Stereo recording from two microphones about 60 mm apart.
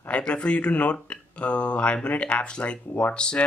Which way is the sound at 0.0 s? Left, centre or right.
Centre.